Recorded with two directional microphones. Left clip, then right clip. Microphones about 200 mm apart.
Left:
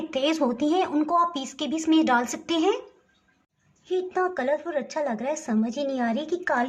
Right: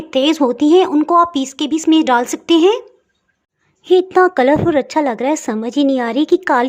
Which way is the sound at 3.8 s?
50° right (ahead or behind).